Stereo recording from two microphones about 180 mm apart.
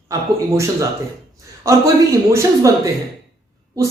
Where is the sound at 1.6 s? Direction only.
15° right (ahead or behind).